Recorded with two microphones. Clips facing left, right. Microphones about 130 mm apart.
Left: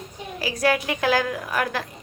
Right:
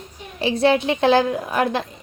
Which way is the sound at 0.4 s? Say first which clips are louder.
Right 5 dB; 25° right (ahead or behind).